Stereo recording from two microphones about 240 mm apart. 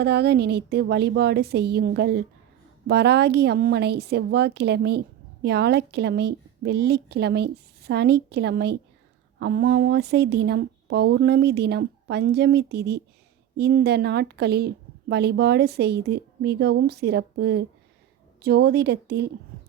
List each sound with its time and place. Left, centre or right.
0.0 s a woman's voice: right